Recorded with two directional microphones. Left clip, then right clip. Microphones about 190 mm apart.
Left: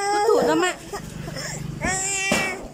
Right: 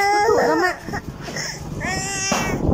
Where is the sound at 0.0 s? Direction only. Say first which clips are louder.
Right 3 dB; centre (ahead or behind).